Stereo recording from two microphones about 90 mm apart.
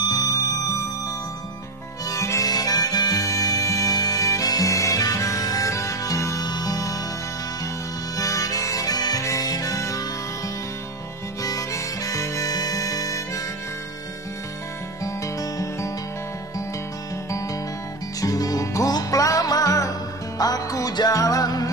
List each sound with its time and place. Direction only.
0.0 s music: 45° left (ahead or behind)
2.0 s music: 35° left (ahead or behind)
8.2 s harmonica: 40° left (ahead or behind)
11.4 s harmonica: 40° left (ahead or behind)
15.0 s music: 35° left (ahead or behind)
18.2 s music: 40° left (ahead or behind)